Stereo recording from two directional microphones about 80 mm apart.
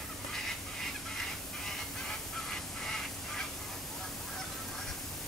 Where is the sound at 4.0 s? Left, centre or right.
Centre.